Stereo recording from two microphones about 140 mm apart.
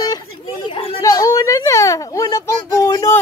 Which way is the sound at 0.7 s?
40° left (ahead or behind).